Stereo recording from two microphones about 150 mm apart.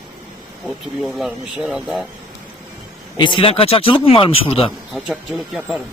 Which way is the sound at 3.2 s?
35° left (ahead or behind).